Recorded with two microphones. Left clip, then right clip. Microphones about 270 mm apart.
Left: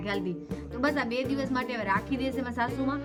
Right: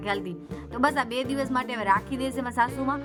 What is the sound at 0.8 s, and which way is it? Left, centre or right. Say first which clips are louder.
Speech: right 4 dB; right.